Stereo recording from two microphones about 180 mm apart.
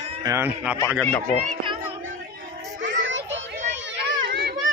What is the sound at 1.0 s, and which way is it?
Speech, 10° left (ahead or behind).